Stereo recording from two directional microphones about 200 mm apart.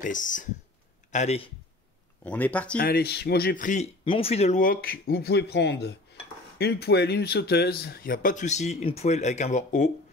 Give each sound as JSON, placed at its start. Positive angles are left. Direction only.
{"t": 0.0, "sound": "speech", "side_deg": 40}
{"t": 2.2, "sound": "speech", "side_deg": 5}
{"t": 2.8, "sound": "speech", "side_deg": 50}
{"t": 4.0, "sound": "speech", "side_deg": 30}